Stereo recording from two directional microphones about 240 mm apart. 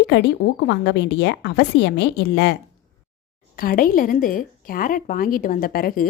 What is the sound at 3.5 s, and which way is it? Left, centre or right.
Speech, left.